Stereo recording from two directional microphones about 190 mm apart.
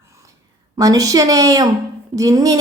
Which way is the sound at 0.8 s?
20° right (ahead or behind).